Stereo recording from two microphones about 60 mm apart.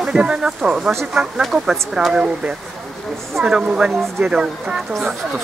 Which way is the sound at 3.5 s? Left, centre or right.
Centre.